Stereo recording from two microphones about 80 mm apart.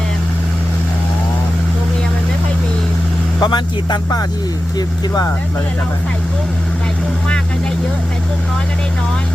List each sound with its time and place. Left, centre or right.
3.4 s speech: left